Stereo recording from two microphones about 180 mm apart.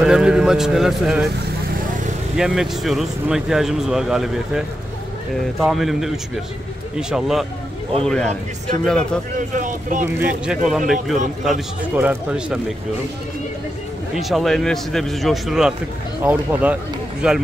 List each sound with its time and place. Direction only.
0.0 s speech: 5° right (ahead or behind)
2.3 s speech: 5° right (ahead or behind)
5.7 s speech: centre (ahead or behind)
9.5 s speech: 45° right (ahead or behind)
10.0 s speech: 10° right (ahead or behind)
14.1 s speech: centre (ahead or behind)